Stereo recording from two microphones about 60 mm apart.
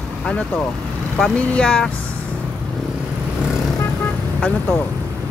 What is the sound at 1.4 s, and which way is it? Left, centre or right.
Speech, centre.